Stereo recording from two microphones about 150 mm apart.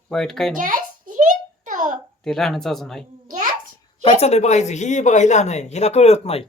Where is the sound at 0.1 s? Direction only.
5° left (ahead or behind).